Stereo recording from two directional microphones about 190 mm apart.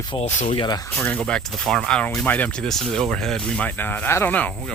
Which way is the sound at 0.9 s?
10° left (ahead or behind).